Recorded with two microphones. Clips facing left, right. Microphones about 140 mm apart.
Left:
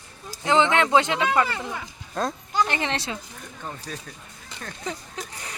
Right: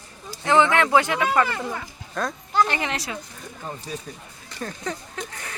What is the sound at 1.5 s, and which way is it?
Speech, centre (ahead or behind).